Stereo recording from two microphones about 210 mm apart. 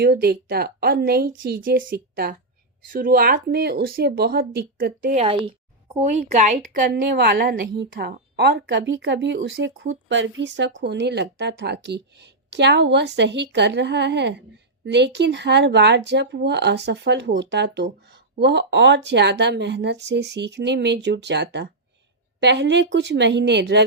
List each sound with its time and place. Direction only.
0.0 s speech: 50° right (ahead or behind)
5.1 s a woman's voice: 25° right (ahead or behind); by 23.8 s 55° right (ahead or behind)